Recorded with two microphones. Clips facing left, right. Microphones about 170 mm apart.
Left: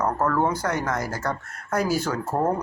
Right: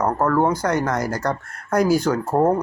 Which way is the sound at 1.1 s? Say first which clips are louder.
Right 5 dB; 5° left (ahead or behind).